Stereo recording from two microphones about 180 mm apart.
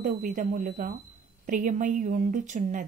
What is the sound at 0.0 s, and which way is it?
Speech, 45° right (ahead or behind).